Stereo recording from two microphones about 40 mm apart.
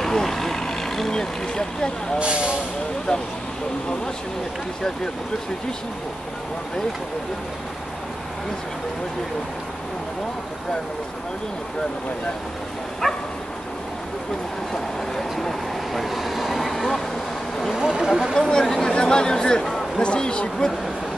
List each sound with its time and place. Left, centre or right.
0.0 s vehicle: centre
2.1 s speech: right
3.1 s speech: centre
13.0 s bow-wow: centre
14.7 s vehicle: centre
17.7 s speech: centre
18.5 s speech: centre
19.6 s a sound: centre
20.0 s speech: left